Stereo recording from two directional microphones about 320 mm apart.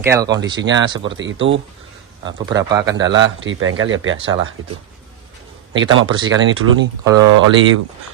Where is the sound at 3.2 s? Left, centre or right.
Right.